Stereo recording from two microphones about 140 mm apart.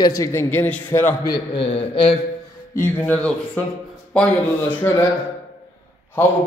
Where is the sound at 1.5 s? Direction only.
40° left (ahead or behind).